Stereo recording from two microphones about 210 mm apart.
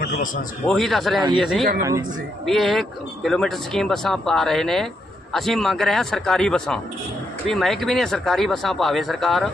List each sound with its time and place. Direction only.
0.0 s a man's voice: 40° left (ahead or behind)
0.7 s speech: centre (ahead or behind)